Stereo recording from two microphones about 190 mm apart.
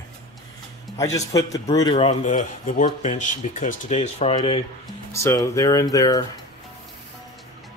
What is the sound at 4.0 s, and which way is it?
Speech, 30° left (ahead or behind).